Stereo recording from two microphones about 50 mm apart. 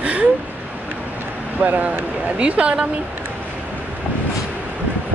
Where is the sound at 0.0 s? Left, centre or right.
Right.